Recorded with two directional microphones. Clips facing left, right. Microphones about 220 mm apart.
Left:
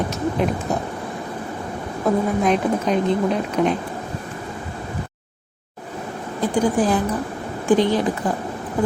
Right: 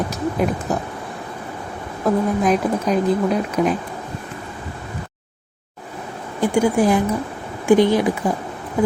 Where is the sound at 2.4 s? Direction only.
5° right (ahead or behind).